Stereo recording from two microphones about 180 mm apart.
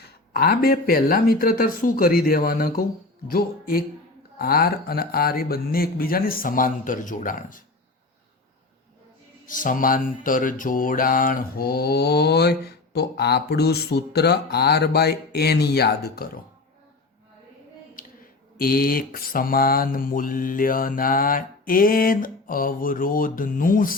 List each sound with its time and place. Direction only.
0.3 s mantra: 55° left (ahead or behind)
9.5 s mantra: 50° left (ahead or behind)
18.5 s mantra: 55° left (ahead or behind)